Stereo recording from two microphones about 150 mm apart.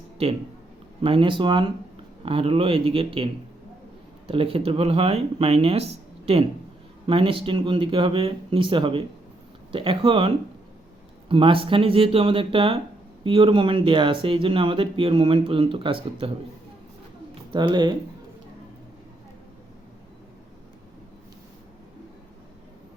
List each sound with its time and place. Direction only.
0.2 s speech: 45° right (ahead or behind)
4.3 s speech: 35° right (ahead or behind)
7.1 s speech: 35° right (ahead or behind)
17.5 s speech: 30° right (ahead or behind)